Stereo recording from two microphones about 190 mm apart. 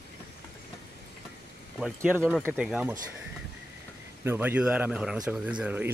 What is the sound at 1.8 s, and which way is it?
Speech, 5° right (ahead or behind).